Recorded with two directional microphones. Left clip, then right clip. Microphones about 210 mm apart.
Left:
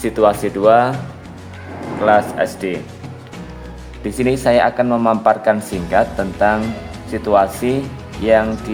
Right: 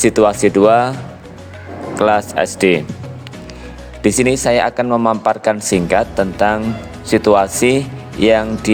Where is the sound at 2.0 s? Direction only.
40° right (ahead or behind).